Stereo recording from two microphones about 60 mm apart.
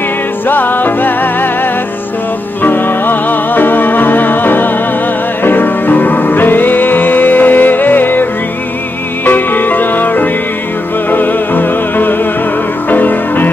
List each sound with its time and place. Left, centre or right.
0.5 s music: left